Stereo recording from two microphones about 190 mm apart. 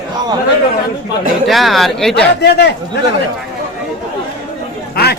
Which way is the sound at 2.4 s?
60° left (ahead or behind).